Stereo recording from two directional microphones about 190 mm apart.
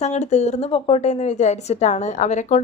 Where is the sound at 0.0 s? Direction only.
35° left (ahead or behind).